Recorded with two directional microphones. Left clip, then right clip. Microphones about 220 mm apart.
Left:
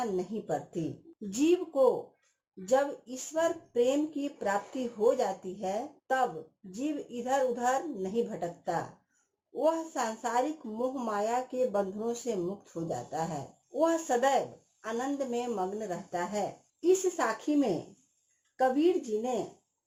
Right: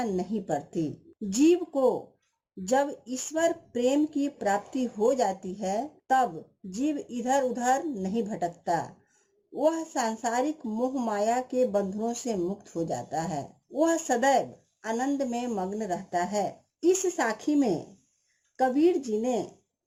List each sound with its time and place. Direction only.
0.2 s speech: 45° right (ahead or behind)
18.8 s speech: 45° right (ahead or behind)